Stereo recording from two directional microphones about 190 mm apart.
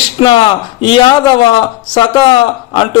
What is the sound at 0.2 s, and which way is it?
Speech, 25° left (ahead or behind).